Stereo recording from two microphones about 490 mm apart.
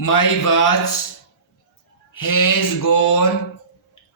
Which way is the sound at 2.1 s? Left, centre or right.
Left.